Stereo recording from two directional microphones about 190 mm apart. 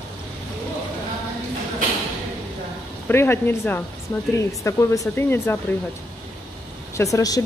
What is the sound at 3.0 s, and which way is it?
Speech, 10° left (ahead or behind).